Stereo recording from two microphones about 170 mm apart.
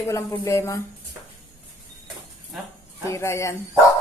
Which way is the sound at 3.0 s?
15° left (ahead or behind).